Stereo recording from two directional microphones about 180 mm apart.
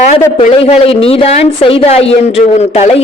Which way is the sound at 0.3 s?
30° left (ahead or behind).